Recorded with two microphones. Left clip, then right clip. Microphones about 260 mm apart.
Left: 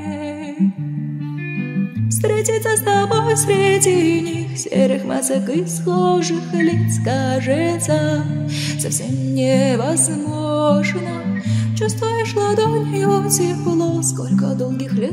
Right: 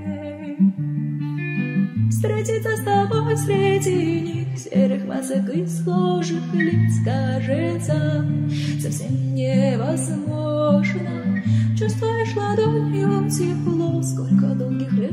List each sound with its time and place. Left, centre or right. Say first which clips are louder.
2.2 s music: left 6 dB; left
9.3 s music: left 6 dB; left